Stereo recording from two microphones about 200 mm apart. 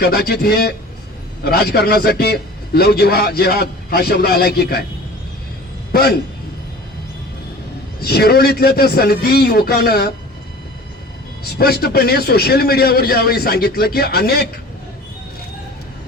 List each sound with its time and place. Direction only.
0.0 s a man's voice: 50° left (ahead or behind)
5.9 s a man's voice: 50° left (ahead or behind)
8.0 s a man's voice: 50° left (ahead or behind)
11.4 s a man's voice: 50° left (ahead or behind)